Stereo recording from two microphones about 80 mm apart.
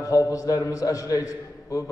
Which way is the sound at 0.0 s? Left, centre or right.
Left.